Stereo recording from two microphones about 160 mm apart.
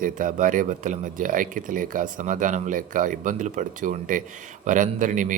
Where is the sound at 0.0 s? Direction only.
55° right (ahead or behind).